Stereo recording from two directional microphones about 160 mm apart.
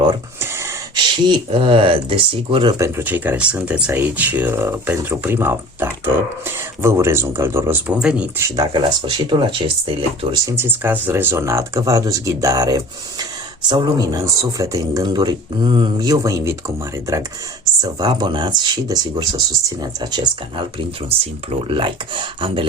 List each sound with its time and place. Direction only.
0.3 s a sound: 15° right (ahead or behind)
0.9 s speech: 30° right (ahead or behind)
2.7 s speech: 15° right (ahead or behind)
8.4 s speech: 20° right (ahead or behind)
10.4 s speech: 15° right (ahead or behind); by 22.6 s 30° right (ahead or behind)